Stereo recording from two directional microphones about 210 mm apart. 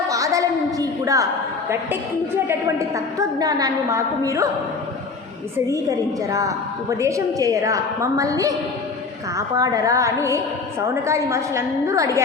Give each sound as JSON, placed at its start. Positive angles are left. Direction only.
{"t": 0.1, "sound": "a sound", "side_deg": -15}
{"t": 2.5, "sound": "a woman's voice", "side_deg": -15}
{"t": 7.0, "sound": "a woman's voice", "side_deg": -15}
{"t": 9.6, "sound": "a woman's voice", "side_deg": -15}